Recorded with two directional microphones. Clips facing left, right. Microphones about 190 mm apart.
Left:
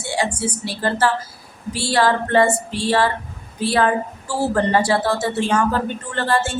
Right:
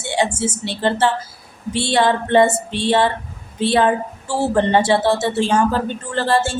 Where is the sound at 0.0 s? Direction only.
25° right (ahead or behind).